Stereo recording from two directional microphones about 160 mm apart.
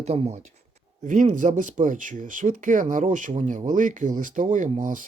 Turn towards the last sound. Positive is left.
turn(degrees=-55)  # may be behind; listen again after turning